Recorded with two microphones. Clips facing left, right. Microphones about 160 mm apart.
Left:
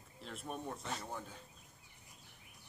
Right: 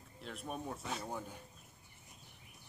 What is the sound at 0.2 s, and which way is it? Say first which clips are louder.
Speech: right 1 dB; centre (ahead or behind).